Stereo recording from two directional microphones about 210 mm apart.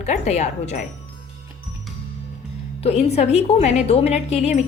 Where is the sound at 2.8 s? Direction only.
30° left (ahead or behind).